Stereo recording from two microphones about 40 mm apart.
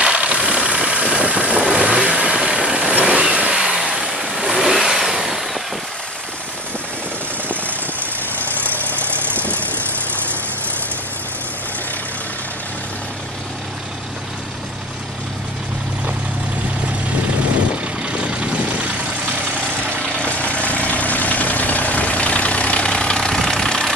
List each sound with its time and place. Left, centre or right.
0.0 s vehicle: right
3.6 s vehicle: centre
8.5 s vehicle: right
18.0 s vehicle: right
20.2 s vehicle: left
22.9 s vehicle: left